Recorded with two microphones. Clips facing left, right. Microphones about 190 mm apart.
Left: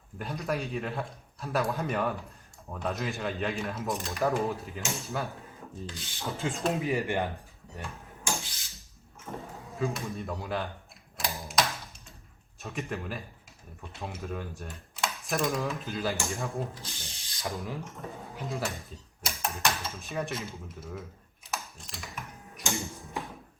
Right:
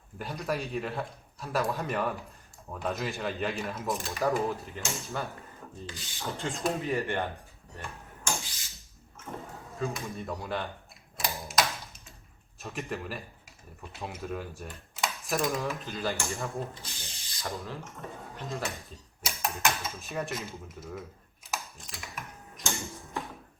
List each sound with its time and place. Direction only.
0.2 s speech: centre (ahead or behind)
6.8 s speech: 15° left (ahead or behind)
7.8 s tick-tock: 15° left (ahead or behind)
8.4 s a sound: centre (ahead or behind)
9.3 s speech: centre (ahead or behind)
11.2 s mechanisms: centre (ahead or behind)
12.5 s speech: centre (ahead or behind)
17.0 s ratchet: centre (ahead or behind)
17.8 s speech: centre (ahead or behind)
21.5 s typing: centre (ahead or behind)
23.0 s music: 15° left (ahead or behind)